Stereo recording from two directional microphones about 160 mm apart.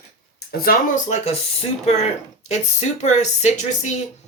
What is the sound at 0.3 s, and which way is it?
Speech, 70° left (ahead or behind).